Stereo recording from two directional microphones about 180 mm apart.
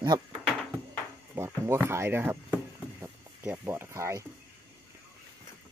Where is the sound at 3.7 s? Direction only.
15° right (ahead or behind).